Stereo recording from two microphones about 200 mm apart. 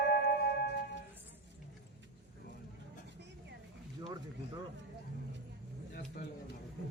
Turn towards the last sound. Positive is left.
turn(degrees=45)  # may be behind; listen again after turning